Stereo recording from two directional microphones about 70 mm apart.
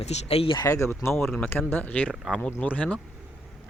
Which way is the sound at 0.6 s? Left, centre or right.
Left.